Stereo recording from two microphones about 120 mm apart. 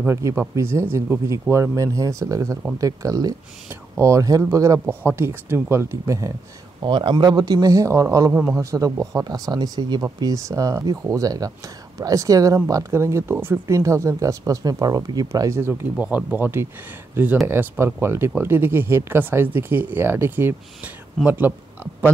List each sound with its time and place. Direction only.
0.0 s speech: 25° right (ahead or behind)
6.8 s a man's voice: 40° right (ahead or behind); by 8.3 s 25° right (ahead or behind)
8.3 s speech: 15° right (ahead or behind)
8.6 s speech: 25° right (ahead or behind)